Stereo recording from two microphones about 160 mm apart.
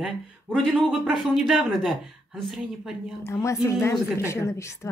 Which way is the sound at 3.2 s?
20° left (ahead or behind).